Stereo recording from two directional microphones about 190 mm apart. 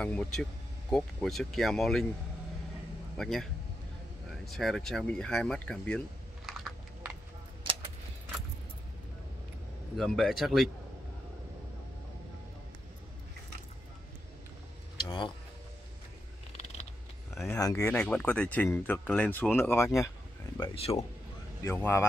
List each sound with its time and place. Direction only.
0.0 s speech: 5° left (ahead or behind)
3.2 s speech: centre (ahead or behind)
4.5 s speech: centre (ahead or behind)
9.9 s speech: centre (ahead or behind)
15.0 s a sound: 25° left (ahead or behind)
17.3 s a sound: centre (ahead or behind)
17.6 s speech: 20° left (ahead or behind)
17.8 s speech: 5° left (ahead or behind)
20.5 s speech: 25° left (ahead or behind)
21.6 s speech: 10° left (ahead or behind)